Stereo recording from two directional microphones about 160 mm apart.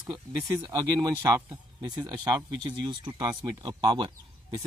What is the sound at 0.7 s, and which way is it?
Speech, 20° right (ahead or behind).